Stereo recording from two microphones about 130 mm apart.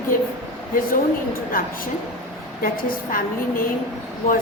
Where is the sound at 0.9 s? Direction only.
90° left.